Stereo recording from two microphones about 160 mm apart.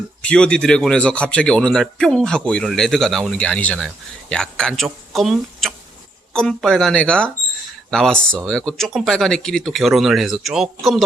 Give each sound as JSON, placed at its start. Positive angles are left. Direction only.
{"t": 0.2, "sound": "speech", "side_deg": 5}